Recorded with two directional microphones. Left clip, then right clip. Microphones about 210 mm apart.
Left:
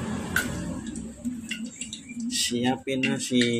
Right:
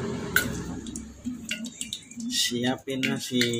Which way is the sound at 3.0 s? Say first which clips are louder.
Left 1 dB; 10° left (ahead or behind).